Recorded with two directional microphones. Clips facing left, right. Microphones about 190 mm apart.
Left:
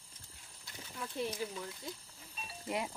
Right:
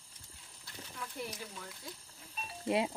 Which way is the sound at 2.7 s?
20° right (ahead or behind).